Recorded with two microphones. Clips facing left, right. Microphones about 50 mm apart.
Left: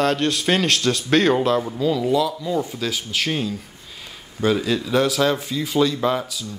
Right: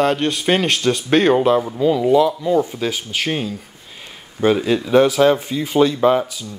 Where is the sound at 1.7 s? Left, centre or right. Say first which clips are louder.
Right 5 dB; right.